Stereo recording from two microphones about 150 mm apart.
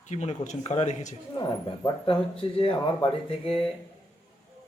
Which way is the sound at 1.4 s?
30° left (ahead or behind).